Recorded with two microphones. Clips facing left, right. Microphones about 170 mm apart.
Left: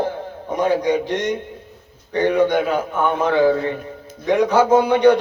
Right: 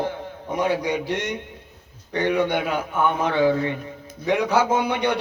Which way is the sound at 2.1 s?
35° left (ahead or behind).